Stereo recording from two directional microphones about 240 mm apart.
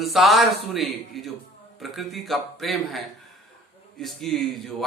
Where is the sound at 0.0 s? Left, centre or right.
Centre.